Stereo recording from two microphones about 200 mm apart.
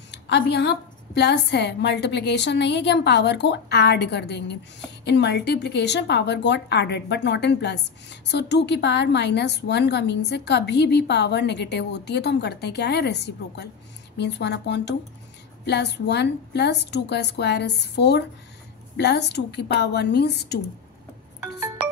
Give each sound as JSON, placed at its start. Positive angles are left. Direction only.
{"t": 0.1, "sound": "speech", "side_deg": 60}